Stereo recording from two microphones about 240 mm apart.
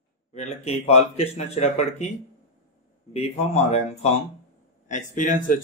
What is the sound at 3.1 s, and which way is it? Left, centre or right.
Speech, left.